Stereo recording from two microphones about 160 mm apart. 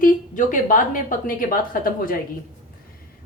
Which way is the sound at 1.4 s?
60° left (ahead or behind).